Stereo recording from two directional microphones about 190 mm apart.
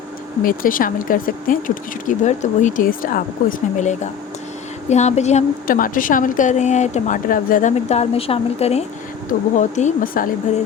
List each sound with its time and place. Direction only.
0.4 s a woman's voice: 45° left (ahead or behind)